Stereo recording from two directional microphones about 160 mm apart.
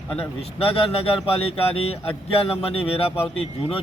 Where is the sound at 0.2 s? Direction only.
35° left (ahead or behind).